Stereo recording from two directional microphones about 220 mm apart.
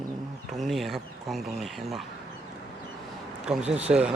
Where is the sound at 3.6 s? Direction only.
30° right (ahead or behind).